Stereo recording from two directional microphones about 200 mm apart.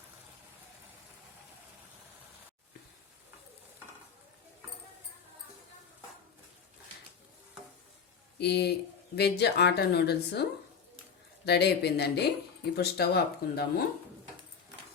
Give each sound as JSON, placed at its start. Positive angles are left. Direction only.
{"t": 8.4, "sound": "a woman's voice", "side_deg": 55}
{"t": 11.4, "sound": "a woman's voice", "side_deg": 55}